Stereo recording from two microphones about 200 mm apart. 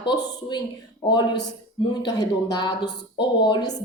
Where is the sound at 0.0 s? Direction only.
20° left (ahead or behind).